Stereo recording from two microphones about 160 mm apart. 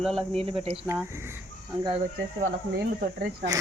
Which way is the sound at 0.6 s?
40° right (ahead or behind).